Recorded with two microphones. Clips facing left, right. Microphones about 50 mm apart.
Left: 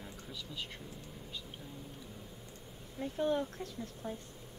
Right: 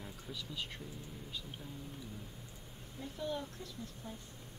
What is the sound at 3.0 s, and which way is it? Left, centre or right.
Speech, left.